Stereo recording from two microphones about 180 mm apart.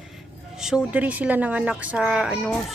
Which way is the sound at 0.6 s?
5° right (ahead or behind).